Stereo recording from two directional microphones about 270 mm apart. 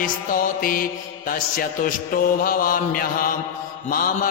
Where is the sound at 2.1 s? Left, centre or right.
Left.